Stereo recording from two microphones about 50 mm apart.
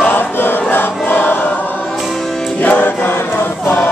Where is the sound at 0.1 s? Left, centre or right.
Left.